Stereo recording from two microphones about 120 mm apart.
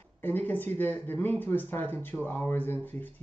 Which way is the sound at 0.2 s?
15° left (ahead or behind).